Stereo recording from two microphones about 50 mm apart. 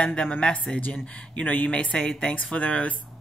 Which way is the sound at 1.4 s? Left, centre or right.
Left.